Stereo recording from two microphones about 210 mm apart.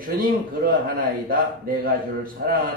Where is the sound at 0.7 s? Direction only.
40° right (ahead or behind).